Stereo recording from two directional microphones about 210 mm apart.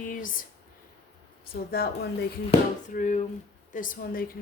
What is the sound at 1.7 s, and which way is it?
A woman's voice, 45° left (ahead or behind).